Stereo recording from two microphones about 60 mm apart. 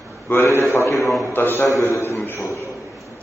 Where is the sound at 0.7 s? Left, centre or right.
Left.